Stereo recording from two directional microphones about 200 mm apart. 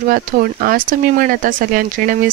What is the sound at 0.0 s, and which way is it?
Speech, 45° right (ahead or behind).